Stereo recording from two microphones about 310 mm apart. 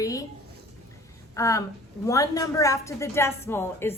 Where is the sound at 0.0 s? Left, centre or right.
Centre.